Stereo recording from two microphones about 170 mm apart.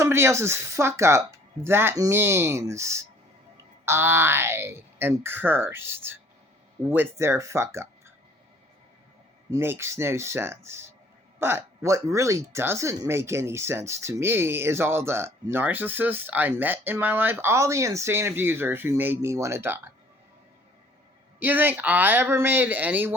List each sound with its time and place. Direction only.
0.0 s speech: 15° right (ahead or behind)
9.5 s speech: 15° right (ahead or behind)
21.3 s speech: 10° right (ahead or behind)